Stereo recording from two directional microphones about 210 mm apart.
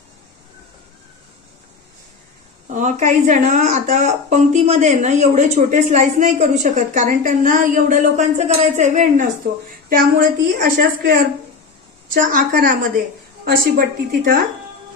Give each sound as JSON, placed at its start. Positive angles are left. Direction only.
{"t": 2.7, "sound": "a woman's voice", "side_deg": -35}